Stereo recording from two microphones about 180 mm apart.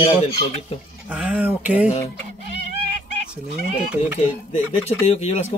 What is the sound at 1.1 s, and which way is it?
Speech, 10° right (ahead or behind).